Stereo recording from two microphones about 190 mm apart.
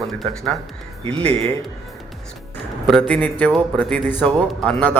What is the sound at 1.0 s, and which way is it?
Speech, 30° right (ahead or behind).